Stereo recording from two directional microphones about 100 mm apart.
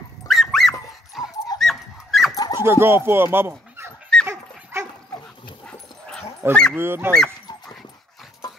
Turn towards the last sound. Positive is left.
turn(degrees=5)  # may be behind; listen again after turning